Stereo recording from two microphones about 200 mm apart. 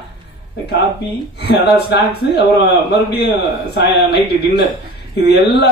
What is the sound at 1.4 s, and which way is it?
A man's voice, 55° left (ahead or behind).